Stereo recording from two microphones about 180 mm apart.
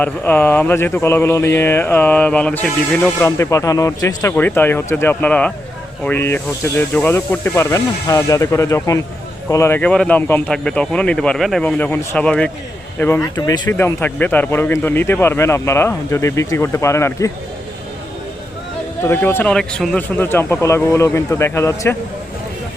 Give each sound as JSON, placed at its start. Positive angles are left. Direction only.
{"t": 0.0, "sound": "speech", "side_deg": 10}
{"t": 19.0, "sound": "speech", "side_deg": 10}